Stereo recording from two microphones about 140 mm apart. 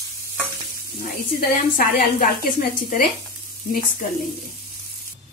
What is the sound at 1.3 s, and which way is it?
A woman's voice, 80° left.